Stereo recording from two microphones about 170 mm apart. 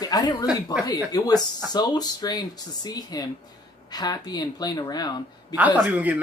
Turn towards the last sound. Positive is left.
turn(degrees=-10)  # may be behind; listen again after turning